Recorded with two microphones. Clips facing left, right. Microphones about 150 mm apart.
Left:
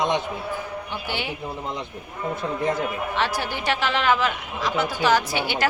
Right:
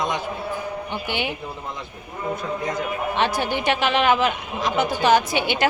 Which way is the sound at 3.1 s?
20° right (ahead or behind).